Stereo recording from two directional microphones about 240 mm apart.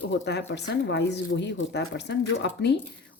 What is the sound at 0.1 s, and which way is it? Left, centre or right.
Speech, left.